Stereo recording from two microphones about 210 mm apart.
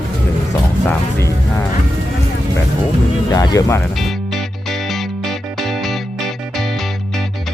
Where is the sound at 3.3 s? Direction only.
20° left (ahead or behind).